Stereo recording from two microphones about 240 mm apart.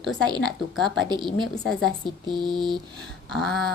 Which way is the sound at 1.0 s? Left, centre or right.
Centre.